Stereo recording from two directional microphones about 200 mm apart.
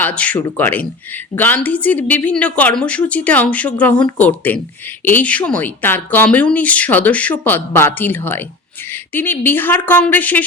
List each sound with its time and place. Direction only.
0.0 s a woman's voice: 5° left (ahead or behind)